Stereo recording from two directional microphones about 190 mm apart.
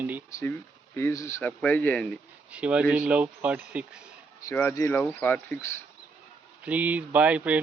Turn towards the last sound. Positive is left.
turn(degrees=-10)  # may be behind; listen again after turning